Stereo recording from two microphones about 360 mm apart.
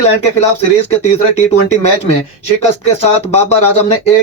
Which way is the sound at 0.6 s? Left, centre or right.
Centre.